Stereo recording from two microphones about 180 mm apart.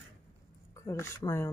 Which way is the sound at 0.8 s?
15° left (ahead or behind).